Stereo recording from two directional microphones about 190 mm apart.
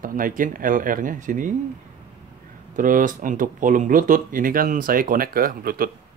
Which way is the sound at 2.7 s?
45° right (ahead or behind).